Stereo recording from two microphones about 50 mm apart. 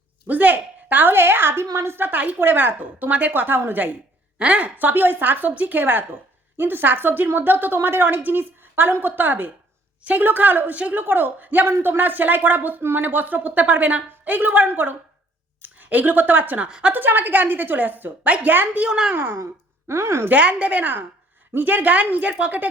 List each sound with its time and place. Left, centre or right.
0.3 s a sound: right
2.0 s a woman's voice: right
10.0 s a woman's voice: right
16.6 s a woman's voice: centre
16.9 s a woman's voice: right
18.8 s speech: centre
19.9 s speech: right
20.3 s a woman's voice: right